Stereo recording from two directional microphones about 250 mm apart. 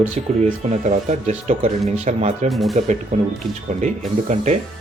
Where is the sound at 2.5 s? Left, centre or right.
Centre.